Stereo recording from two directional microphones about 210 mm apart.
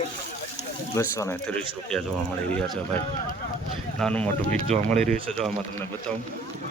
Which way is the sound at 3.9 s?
5° left (ahead or behind).